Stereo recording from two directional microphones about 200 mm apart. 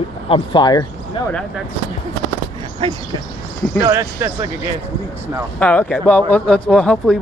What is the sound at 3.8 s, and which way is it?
Speech, 15° right (ahead or behind).